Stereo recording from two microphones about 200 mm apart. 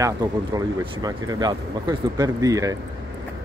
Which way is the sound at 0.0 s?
20° right (ahead or behind).